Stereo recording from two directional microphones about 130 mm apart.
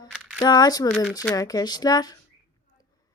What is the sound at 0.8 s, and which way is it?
Speech, 5° left (ahead or behind).